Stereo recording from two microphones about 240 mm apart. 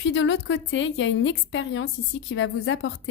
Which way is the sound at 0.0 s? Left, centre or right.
Left.